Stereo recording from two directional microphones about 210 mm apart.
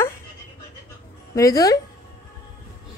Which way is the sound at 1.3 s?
15° left (ahead or behind).